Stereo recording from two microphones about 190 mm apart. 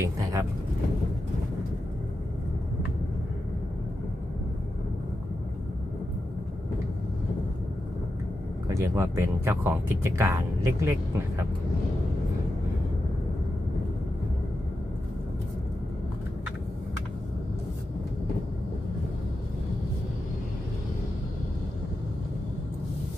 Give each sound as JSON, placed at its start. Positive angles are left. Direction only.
{"t": 0.0, "sound": "vehicle", "side_deg": -15}
{"t": 8.6, "sound": "speech", "side_deg": -15}